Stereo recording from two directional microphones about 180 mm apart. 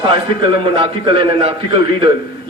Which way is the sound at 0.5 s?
30° right (ahead or behind).